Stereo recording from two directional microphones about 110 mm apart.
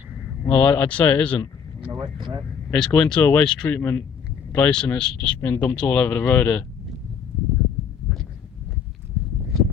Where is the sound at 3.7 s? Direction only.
20° left (ahead or behind).